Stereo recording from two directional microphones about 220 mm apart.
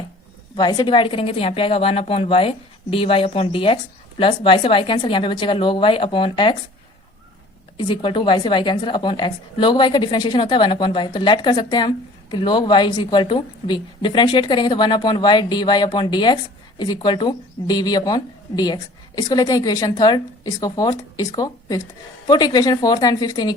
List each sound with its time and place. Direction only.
0.5 s a woman's voice: 20° left (ahead or behind)
7.8 s a woman's voice: 20° left (ahead or behind)